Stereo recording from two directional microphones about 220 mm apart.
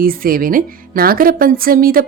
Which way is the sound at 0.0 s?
40° right (ahead or behind).